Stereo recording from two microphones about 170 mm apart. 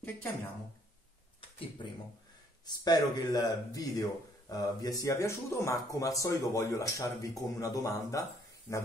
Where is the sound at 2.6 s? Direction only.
25° left (ahead or behind).